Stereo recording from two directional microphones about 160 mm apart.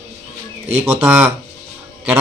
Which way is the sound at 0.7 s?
15° right (ahead or behind).